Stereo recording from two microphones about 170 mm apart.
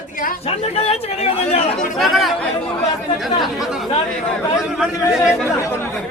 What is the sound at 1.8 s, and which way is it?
Speech, centre (ahead or behind).